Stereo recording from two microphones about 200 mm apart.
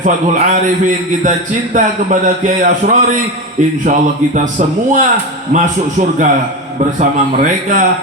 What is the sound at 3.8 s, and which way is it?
Mantra, 40° right (ahead or behind).